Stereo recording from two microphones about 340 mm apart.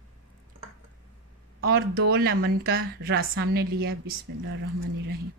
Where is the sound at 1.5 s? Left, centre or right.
Right.